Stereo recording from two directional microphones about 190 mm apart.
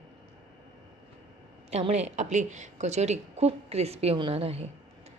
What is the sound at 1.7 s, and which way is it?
A woman's voice, 35° right (ahead or behind).